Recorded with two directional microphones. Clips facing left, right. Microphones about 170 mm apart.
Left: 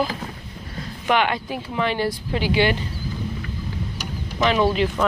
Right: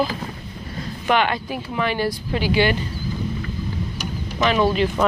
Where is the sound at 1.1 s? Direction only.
15° left (ahead or behind).